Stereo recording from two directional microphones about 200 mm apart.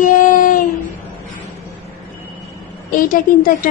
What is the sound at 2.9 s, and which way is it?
Speech, 45° left (ahead or behind).